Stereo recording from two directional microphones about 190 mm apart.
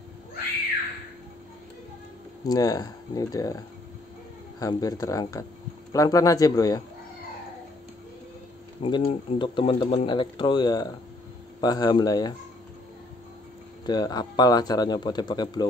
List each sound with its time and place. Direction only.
2.4 s speech: 20° left (ahead or behind)
8.8 s speech: 25° left (ahead or behind)
13.8 s speech: 20° left (ahead or behind)